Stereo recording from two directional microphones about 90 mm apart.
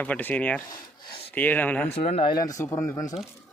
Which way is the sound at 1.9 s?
90° left.